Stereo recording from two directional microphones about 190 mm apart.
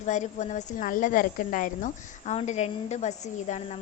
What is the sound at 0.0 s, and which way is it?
A woman's voice, 40° left (ahead or behind).